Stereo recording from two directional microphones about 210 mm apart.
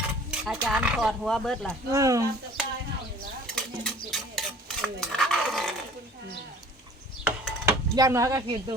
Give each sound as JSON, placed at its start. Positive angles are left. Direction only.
{"t": 0.3, "sound": "speech", "side_deg": 0}
{"t": 1.9, "sound": "speech", "side_deg": -15}
{"t": 3.4, "sound": "stir", "side_deg": 0}
{"t": 7.3, "sound": "a sound", "side_deg": -5}
{"t": 7.9, "sound": "speech", "side_deg": -15}